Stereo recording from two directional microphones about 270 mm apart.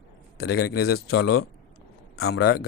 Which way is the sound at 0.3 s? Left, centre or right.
Left.